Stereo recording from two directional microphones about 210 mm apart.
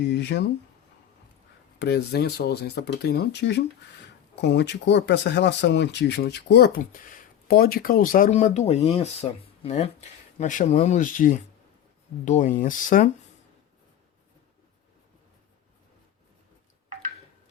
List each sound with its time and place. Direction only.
0.1 s speech: 55° left (ahead or behind)
1.8 s speech: 50° left (ahead or behind)